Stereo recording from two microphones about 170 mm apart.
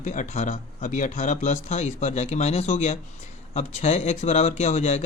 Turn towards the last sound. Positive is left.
turn(degrees=40)  # may be behind; listen again after turning